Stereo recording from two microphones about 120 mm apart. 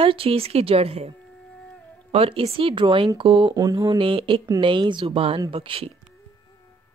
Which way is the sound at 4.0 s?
50° right (ahead or behind).